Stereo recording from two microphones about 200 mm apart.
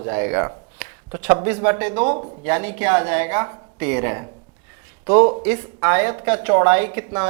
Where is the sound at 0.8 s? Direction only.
10° right (ahead or behind).